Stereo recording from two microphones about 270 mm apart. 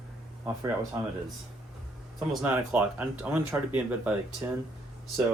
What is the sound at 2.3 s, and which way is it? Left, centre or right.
Speech, centre.